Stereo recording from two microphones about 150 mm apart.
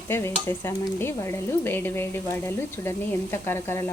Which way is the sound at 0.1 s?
15° left (ahead or behind).